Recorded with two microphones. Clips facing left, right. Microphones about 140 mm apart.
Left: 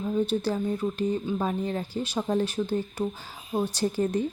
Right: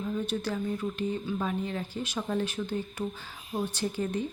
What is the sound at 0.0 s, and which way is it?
Speech, 30° left (ahead or behind).